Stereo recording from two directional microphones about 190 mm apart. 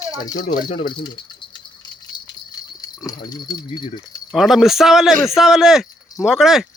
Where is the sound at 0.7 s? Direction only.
25° left (ahead or behind).